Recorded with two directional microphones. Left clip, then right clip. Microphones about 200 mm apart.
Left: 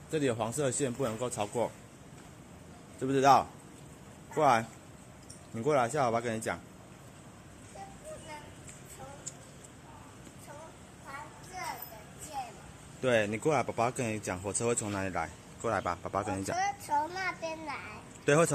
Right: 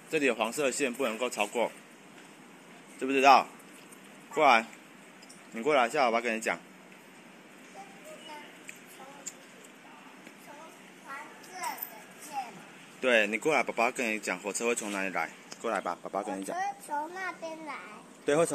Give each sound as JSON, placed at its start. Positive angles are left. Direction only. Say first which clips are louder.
{"t": 0.1, "sound": "speech", "louder": "right 3 dB", "side_deg": -5}
{"t": 3.0, "sound": "speech", "louder": "right 3 dB", "side_deg": 0}
{"t": 13.0, "sound": "a child's voice", "louder": "right 3 dB", "side_deg": 0}